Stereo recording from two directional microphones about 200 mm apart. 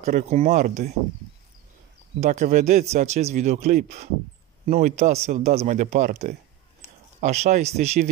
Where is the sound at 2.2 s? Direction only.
35° right (ahead or behind).